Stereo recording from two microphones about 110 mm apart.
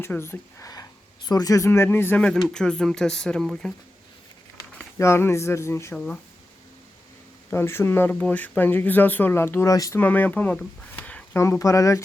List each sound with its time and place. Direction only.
0.0 s speech: 20° left (ahead or behind)
1.3 s speech: 35° left (ahead or behind)
2.4 s speech: 5° left (ahead or behind)
4.9 s speech: 25° left (ahead or behind)
7.5 s speech: 20° left (ahead or behind)
9.7 s speech: 30° left (ahead or behind)
10.0 s speech: 15° left (ahead or behind)
11.3 s speech: 25° left (ahead or behind)